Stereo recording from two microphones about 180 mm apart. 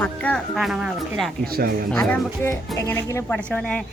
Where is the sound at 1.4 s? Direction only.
55° right (ahead or behind).